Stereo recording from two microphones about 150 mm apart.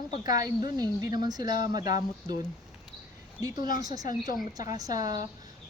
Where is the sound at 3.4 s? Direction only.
25° right (ahead or behind).